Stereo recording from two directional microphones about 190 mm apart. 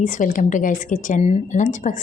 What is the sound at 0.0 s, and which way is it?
A woman's voice, 45° left (ahead or behind).